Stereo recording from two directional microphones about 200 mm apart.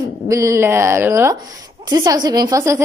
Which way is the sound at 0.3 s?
15° right (ahead or behind).